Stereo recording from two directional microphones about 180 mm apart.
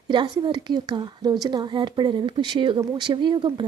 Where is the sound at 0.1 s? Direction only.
25° right (ahead or behind).